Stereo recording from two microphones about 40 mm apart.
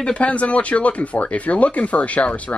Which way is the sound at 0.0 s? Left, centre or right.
Left.